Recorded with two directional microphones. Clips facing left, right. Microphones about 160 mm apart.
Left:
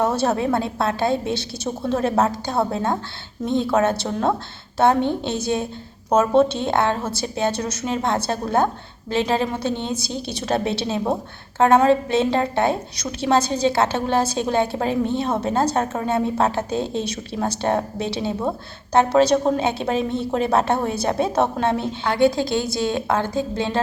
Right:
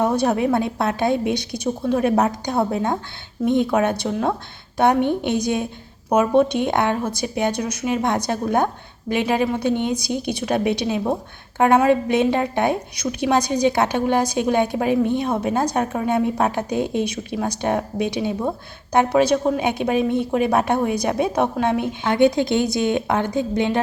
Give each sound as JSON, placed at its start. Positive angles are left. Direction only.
{"t": 0.0, "sound": "a woman's voice", "side_deg": -15}